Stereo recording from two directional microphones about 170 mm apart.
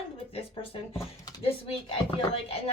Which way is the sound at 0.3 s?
30° left (ahead or behind).